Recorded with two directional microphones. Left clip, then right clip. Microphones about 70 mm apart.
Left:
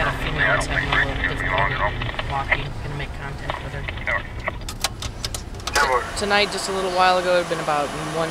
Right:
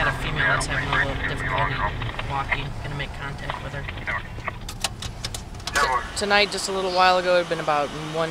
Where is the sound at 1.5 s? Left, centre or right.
Left.